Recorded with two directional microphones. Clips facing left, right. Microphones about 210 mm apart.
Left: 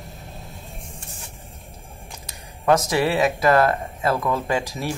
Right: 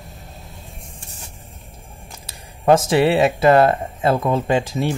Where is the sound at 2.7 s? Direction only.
25° right (ahead or behind).